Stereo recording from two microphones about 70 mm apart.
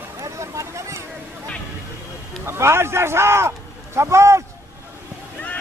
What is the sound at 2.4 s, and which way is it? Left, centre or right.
Speech, right.